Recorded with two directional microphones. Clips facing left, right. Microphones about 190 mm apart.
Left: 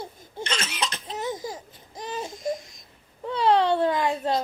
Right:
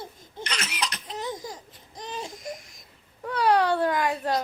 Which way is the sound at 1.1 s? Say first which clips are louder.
Left 4 dB; 5° left (ahead or behind).